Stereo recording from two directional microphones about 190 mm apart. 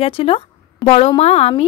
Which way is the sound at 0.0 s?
30° left (ahead or behind).